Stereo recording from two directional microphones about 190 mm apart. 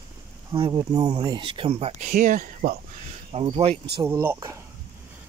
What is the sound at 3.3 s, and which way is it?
Speech, 30° right (ahead or behind).